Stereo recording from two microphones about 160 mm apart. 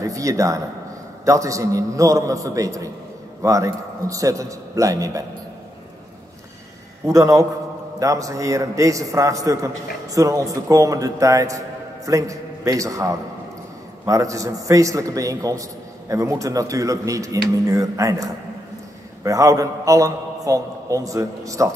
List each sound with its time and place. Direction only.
0.0 s a man's voice: 20° right (ahead or behind)
7.1 s a man's voice: 20° right (ahead or behind)